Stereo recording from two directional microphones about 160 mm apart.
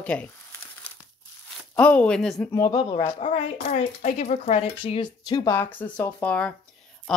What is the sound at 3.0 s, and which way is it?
Speech, 45° left (ahead or behind).